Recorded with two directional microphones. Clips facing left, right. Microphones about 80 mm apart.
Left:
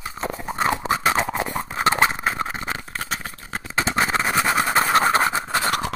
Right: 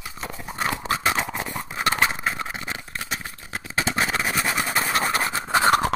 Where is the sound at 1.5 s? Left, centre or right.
Left.